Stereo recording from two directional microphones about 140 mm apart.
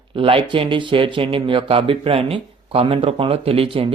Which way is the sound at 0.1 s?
40° right (ahead or behind).